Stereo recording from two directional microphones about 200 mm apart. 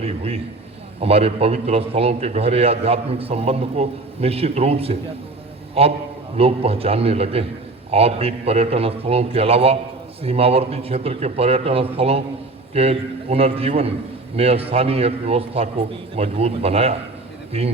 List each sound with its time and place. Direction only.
0.0 s a man's voice: 30° right (ahead or behind)